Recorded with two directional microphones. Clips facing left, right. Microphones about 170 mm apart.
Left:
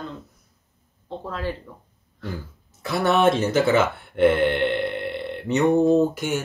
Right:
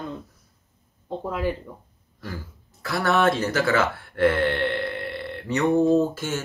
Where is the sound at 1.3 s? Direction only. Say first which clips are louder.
Right 3 dB; 15° right (ahead or behind).